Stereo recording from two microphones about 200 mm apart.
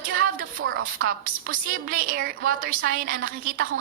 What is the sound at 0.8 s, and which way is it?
A woman's voice, 45° right (ahead or behind).